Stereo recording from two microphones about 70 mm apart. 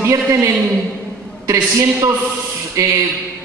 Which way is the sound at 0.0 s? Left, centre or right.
Right.